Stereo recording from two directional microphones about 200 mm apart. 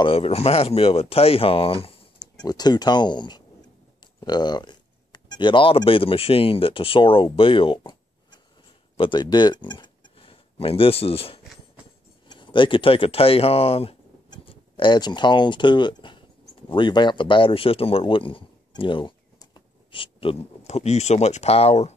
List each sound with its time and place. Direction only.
0.0 s speech: 30° left (ahead or behind)